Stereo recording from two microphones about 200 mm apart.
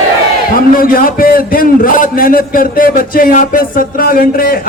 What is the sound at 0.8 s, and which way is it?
A man's voice, 45° left (ahead or behind).